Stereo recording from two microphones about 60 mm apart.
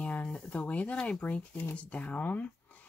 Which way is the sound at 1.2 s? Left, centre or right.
Left.